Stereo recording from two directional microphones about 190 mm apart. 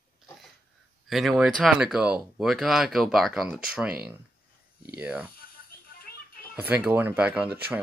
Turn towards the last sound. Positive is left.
turn(degrees=-10)  # may be behind; listen again after turning